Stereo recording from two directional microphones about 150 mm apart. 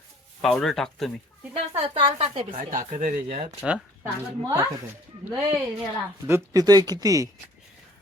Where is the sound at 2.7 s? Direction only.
60° right (ahead or behind).